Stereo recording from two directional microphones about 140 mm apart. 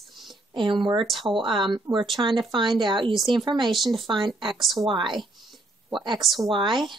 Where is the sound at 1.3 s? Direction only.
35° right (ahead or behind).